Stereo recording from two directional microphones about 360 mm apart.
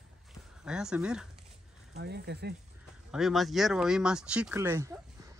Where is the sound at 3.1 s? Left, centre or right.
Centre.